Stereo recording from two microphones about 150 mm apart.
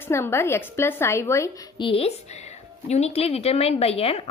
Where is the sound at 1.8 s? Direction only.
40° left (ahead or behind).